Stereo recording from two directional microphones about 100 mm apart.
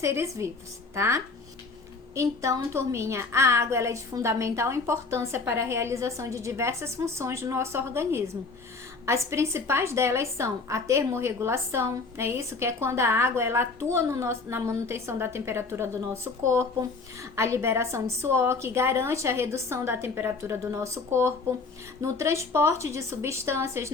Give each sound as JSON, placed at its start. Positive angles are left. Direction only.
{"t": 0.0, "sound": "a woman's voice", "side_deg": -30}